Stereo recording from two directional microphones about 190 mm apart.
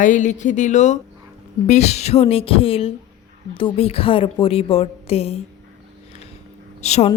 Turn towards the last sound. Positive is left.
turn(degrees=35)  # may be behind; listen again after turning